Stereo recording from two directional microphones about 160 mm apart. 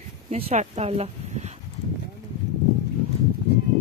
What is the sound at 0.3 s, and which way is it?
Speech, 40° right (ahead or behind).